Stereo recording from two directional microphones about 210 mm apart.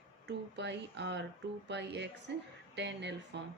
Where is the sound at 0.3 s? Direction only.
55° right (ahead or behind).